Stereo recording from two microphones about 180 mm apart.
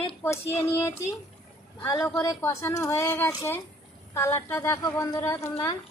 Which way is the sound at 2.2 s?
15° left (ahead or behind).